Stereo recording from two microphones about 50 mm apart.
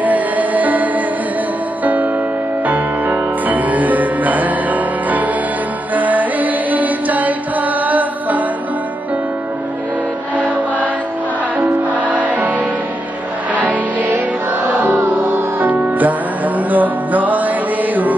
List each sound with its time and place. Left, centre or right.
0.0 s music: right
2.6 s music: right
11.9 s music: right
13.7 s music: right